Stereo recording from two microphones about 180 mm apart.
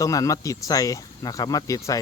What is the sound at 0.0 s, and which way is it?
Speech, 20° left (ahead or behind).